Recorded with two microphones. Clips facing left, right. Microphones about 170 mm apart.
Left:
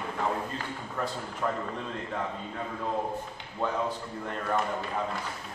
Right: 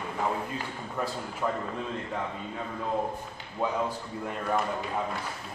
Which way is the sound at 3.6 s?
10° right (ahead or behind).